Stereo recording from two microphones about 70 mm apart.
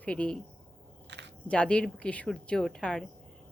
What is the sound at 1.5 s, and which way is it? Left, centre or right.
A woman's voice, centre.